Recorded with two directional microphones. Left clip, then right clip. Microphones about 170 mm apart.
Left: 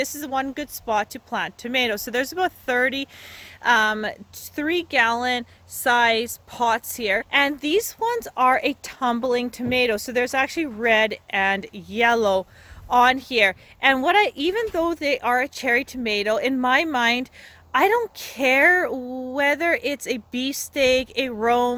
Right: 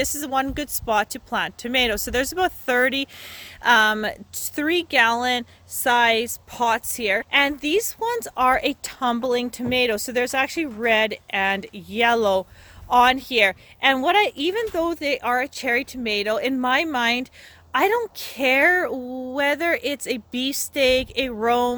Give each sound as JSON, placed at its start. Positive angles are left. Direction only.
{"t": 0.0, "sound": "a woman's voice", "side_deg": -25}